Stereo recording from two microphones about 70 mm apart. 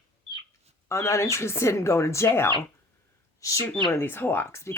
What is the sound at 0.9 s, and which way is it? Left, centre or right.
Speech, left.